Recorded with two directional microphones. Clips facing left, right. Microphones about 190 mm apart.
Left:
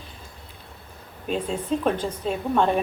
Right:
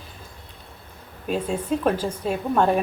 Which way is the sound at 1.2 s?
5° right (ahead or behind).